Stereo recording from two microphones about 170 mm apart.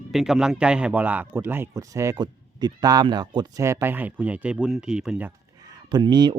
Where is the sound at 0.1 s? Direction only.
Centre (ahead or behind).